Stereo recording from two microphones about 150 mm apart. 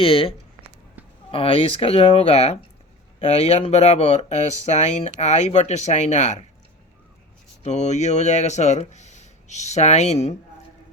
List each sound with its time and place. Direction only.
0.0 s speech: 40° left (ahead or behind)
7.6 s speech: 50° left (ahead or behind)